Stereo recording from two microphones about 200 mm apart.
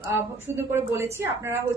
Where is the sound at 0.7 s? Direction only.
10° right (ahead or behind).